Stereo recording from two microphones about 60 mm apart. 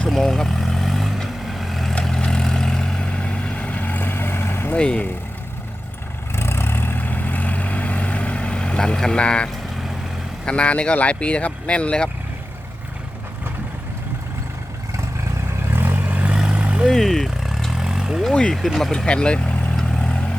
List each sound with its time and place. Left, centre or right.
0.1 s vehicle: centre; by 4.7 s left
4.8 s speech: centre
6.3 s vehicle: left; by 9.5 s centre
10.4 s speech: centre
15.7 s vehicle: right; by 16.8 s centre
16.8 s vehicle: centre
18.8 s speech: centre
19.7 s vehicle: centre